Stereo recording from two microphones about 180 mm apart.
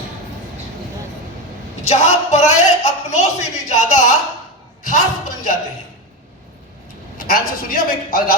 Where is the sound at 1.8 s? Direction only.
40° left (ahead or behind).